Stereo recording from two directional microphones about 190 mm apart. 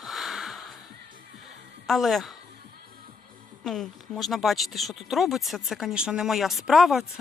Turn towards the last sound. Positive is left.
turn(degrees=0)  # may be behind; listen again after turning